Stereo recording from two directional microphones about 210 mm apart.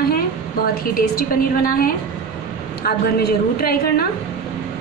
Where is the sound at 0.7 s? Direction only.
45° left (ahead or behind).